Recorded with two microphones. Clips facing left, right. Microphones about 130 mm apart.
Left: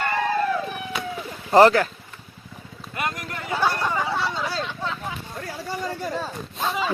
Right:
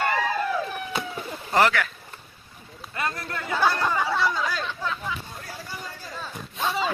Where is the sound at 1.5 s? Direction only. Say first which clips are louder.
Left 7 dB; 35° left (ahead or behind).